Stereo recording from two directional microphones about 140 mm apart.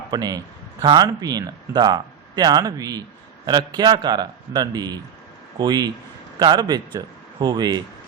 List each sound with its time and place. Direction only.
0.1 s a man's voice: 25° right (ahead or behind)